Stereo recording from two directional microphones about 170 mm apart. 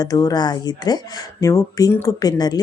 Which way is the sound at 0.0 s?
20° left (ahead or behind).